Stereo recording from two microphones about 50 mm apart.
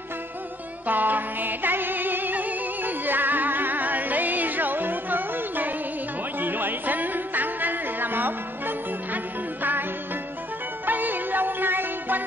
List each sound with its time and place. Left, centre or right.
0.8 s music: right
10.9 s music: right